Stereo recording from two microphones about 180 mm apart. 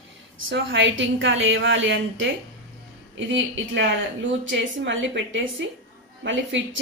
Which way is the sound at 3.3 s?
90° right.